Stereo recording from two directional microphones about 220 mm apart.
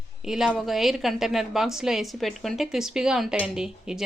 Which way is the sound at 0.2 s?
Centre (ahead or behind).